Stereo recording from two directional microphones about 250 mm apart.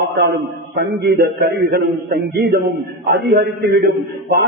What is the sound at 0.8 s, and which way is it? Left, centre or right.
A man's voice, right.